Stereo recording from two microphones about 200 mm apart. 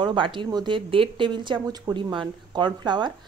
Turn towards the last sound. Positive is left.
turn(degrees=-20)  # may be behind; listen again after turning